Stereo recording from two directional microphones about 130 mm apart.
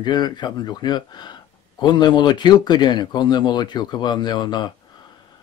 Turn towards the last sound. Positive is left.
turn(degrees=35)  # may be behind; listen again after turning